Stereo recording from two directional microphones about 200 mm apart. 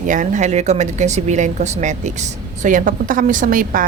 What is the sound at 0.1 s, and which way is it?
A woman's voice, 40° right (ahead or behind).